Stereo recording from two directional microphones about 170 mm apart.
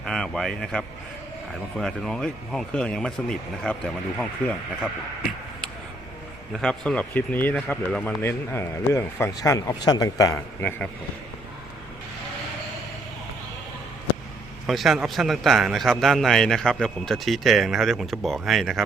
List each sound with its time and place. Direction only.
0.0 s a man's voice: 5° left (ahead or behind)
6.5 s speech: 5° left (ahead or behind)
14.7 s a man's voice: centre (ahead or behind)